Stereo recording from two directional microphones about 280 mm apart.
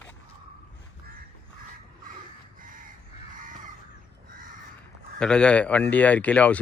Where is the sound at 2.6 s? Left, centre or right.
Right.